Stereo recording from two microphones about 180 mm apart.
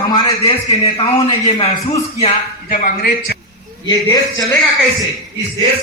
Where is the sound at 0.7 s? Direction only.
35° left (ahead or behind).